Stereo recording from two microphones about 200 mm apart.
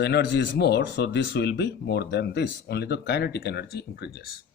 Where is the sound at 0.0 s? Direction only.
55° left (ahead or behind).